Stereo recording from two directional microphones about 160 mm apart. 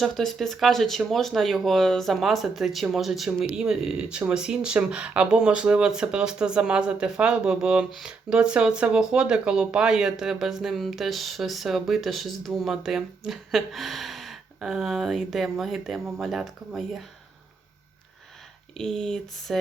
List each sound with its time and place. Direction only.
0.0 s speech: centre (ahead or behind)
18.8 s speech: 5° left (ahead or behind)